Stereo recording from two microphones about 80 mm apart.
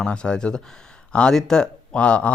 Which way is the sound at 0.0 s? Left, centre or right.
Centre.